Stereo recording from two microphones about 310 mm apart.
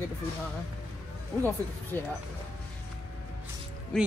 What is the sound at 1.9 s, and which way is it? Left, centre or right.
Speech, centre.